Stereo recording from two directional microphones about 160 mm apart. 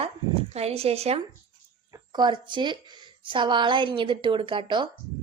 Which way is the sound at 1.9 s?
25° right (ahead or behind).